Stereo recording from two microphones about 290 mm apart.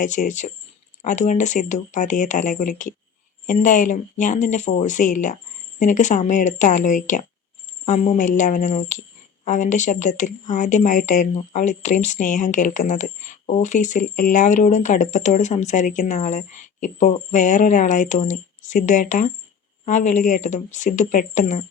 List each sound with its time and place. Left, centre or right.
0.0 s speech: left